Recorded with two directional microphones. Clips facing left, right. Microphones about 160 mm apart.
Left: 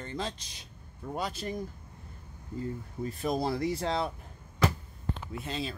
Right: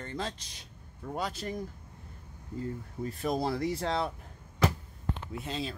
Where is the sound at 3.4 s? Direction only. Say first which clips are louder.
Left 1 dB; 15° left (ahead or behind).